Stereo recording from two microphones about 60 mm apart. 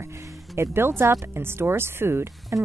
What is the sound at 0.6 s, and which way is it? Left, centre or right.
A woman's voice, right.